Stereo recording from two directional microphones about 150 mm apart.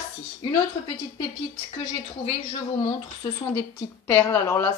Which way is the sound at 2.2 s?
40° left (ahead or behind).